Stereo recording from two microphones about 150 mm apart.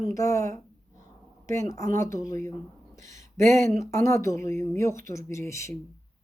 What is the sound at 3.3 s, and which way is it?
Speech, 55° right (ahead or behind).